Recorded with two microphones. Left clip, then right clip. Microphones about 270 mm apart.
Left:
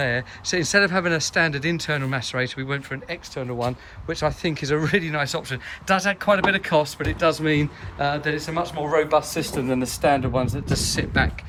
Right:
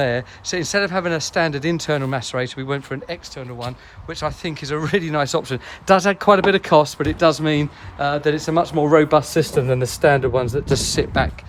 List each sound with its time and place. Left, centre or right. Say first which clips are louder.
0.0 s a man's voice: right 3 dB; centre